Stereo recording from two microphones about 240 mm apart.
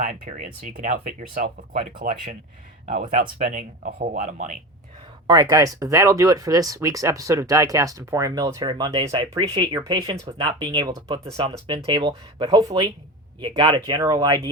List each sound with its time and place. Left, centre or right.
0.0 s speech: right
5.3 s speech: centre